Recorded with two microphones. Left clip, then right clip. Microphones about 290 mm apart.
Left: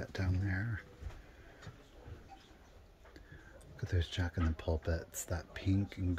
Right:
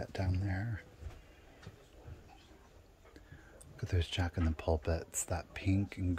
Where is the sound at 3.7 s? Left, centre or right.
Centre.